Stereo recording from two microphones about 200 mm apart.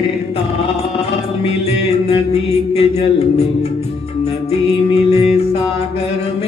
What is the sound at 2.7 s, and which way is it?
Music, 30° left (ahead or behind).